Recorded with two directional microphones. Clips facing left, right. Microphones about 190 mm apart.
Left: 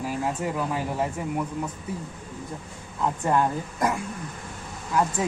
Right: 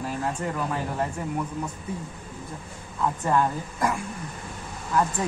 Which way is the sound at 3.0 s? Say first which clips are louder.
Even; 20° left (ahead or behind).